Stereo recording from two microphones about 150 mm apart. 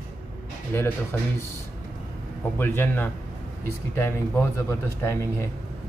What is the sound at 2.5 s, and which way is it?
Speech, 15° left (ahead or behind).